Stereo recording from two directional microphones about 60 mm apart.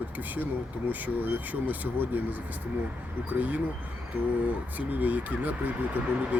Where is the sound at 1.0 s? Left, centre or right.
Right.